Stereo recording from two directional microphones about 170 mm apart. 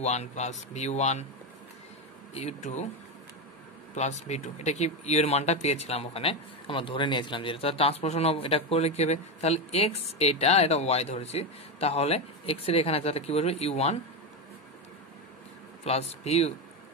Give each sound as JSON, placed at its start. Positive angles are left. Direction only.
{"t": 0.0, "sound": "speech", "side_deg": 40}
{"t": 2.3, "sound": "speech", "side_deg": 40}
{"t": 3.9, "sound": "speech", "side_deg": 40}
{"t": 15.8, "sound": "speech", "side_deg": 40}